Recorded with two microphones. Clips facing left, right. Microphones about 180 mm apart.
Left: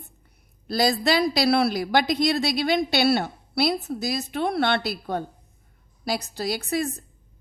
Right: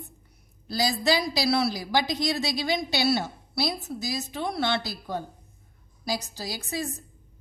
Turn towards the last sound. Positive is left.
turn(degrees=60)  # may be behind; listen again after turning